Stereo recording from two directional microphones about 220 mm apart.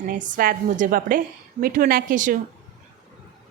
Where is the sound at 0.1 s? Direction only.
40° right (ahead or behind).